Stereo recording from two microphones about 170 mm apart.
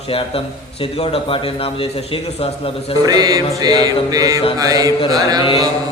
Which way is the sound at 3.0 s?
20° right (ahead or behind).